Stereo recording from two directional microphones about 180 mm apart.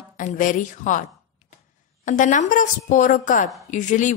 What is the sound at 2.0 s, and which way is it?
A woman's voice, 45° left (ahead or behind).